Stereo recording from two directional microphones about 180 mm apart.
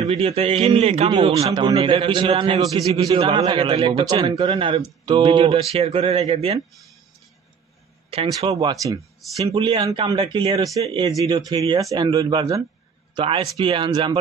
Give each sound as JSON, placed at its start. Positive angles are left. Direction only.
{"t": 0.1, "sound": "a man's voice", "side_deg": -35}
{"t": 8.4, "sound": "a man's voice", "side_deg": -25}
{"t": 10.7, "sound": "a man's voice", "side_deg": -20}